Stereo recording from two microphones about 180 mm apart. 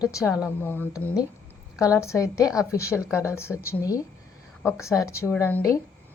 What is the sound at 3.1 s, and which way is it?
A woman's voice, 15° left (ahead or behind).